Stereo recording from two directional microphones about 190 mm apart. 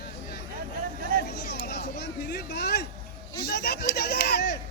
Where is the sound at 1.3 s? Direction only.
60° left (ahead or behind).